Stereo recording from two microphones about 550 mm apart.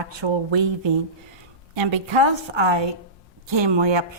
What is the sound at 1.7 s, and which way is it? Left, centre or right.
A woman's voice, right.